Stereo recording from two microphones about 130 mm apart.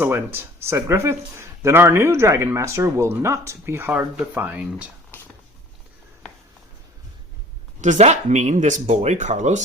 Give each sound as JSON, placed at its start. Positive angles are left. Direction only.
{"t": 0.0, "sound": "speech", "side_deg": -15}
{"t": 7.8, "sound": "speech", "side_deg": -65}